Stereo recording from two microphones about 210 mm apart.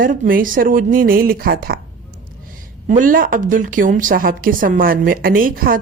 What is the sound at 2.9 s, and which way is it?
A woman's voice, 40° right (ahead or behind).